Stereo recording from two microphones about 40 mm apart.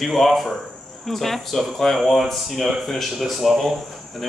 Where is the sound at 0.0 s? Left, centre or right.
Centre.